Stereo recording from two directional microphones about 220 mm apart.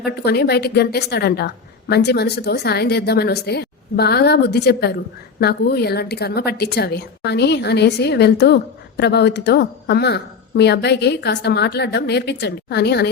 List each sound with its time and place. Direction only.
0.3 s a woman's voice: 45° left (ahead or behind)